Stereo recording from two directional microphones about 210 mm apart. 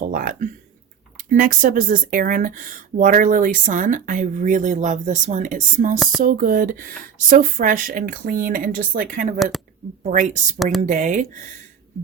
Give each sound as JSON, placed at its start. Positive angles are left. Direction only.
{"t": 0.1, "sound": "speech", "side_deg": -40}